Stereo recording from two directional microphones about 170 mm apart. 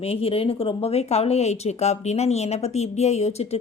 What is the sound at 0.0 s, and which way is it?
Speech, 35° left (ahead or behind).